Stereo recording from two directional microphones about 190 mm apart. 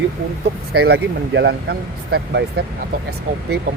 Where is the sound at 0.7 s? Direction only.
60° right (ahead or behind).